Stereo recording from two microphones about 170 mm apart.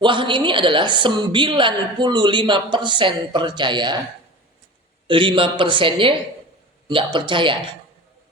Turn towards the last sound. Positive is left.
turn(degrees=-30)  # may be behind; listen again after turning